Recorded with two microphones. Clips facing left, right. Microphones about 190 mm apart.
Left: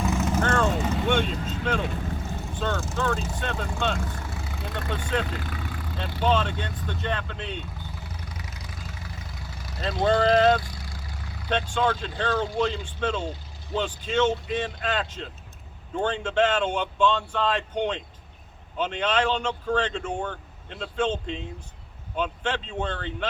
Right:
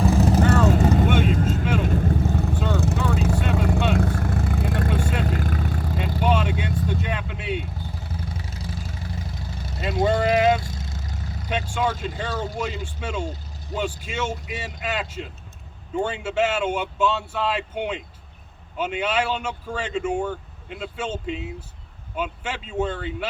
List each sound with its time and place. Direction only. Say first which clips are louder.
0.0 s vehicle: right 6 dB; 35° right (ahead or behind)
0.4 s vehicle: right 4 dB; 5° right (ahead or behind)
0.8 s vehicle: right 7 dB; 40° right (ahead or behind)
1.2 s vehicle: right 6 dB; 50° right (ahead or behind)
6.1 s speech: right 1 dB; 10° right (ahead or behind)
8.3 s vehicle: right 6 dB; 30° right (ahead or behind)
9.8 s speech: right 1 dB; 10° right (ahead or behind)
10.6 s vehicle: right 5 dB; 25° right (ahead or behind)
11.4 s speech: left 1 dB; 10° right (ahead or behind)